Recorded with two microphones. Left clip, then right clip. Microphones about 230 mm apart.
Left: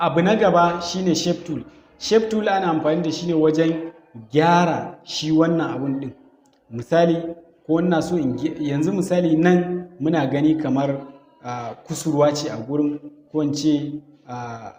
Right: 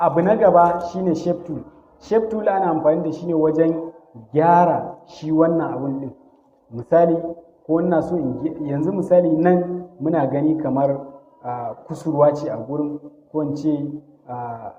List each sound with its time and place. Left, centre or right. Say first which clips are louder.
0.0 s a man's voice: right 2 dB; left